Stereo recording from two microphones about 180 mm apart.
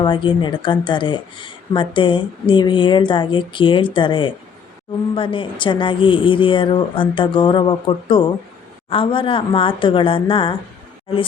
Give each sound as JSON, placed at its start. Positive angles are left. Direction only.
{"t": 0.0, "sound": "speech", "side_deg": 25}